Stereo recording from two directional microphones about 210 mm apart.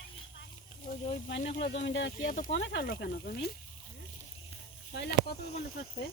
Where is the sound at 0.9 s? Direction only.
35° left (ahead or behind).